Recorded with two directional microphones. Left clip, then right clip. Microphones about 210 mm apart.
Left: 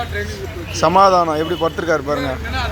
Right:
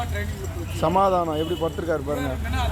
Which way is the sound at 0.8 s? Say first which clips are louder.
Left 8 dB; centre (ahead or behind).